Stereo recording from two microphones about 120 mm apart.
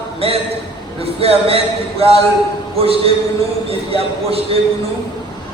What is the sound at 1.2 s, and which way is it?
Speech, 55° right (ahead or behind).